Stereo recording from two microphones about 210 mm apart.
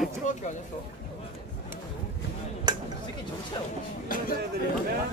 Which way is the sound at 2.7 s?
20° right (ahead or behind).